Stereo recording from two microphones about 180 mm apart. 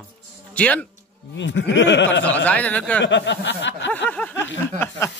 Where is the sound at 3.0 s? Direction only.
80° left.